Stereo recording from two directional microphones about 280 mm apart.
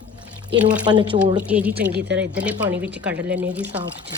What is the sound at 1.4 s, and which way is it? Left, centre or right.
Speech, centre.